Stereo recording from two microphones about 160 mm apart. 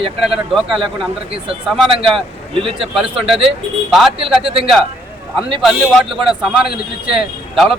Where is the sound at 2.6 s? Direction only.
35° right (ahead or behind).